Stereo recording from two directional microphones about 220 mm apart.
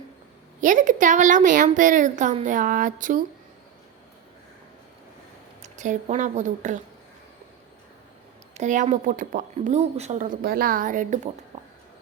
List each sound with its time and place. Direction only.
0.6 s speech: 35° right (ahead or behind)
5.6 s speech: 35° right (ahead or behind)
8.5 s speech: 35° right (ahead or behind)
11.5 s a sound: 30° right (ahead or behind)